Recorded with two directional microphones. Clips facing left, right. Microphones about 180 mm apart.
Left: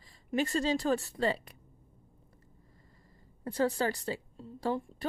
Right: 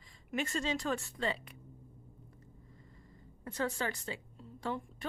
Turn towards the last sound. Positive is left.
turn(degrees=35)  # may be behind; listen again after turning